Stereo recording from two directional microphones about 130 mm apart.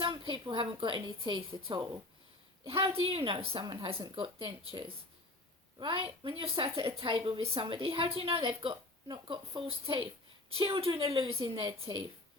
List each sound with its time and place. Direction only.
0.0 s a woman's voice: 40° right (ahead or behind)
10.6 s a woman's voice: 45° right (ahead or behind)